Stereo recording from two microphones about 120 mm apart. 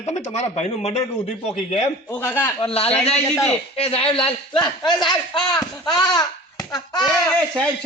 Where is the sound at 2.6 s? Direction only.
55° left (ahead or behind); by 6.3 s 35° left (ahead or behind).